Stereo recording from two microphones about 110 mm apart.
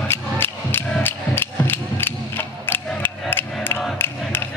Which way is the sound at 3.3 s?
20° left (ahead or behind).